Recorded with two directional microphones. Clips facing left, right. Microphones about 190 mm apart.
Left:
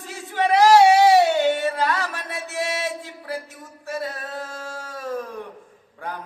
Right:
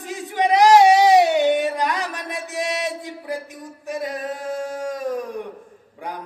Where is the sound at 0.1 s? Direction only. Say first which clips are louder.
Right 1 dB; 15° right (ahead or behind).